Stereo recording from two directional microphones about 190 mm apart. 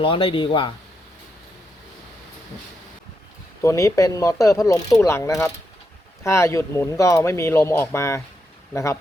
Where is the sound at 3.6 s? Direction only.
15° left (ahead or behind).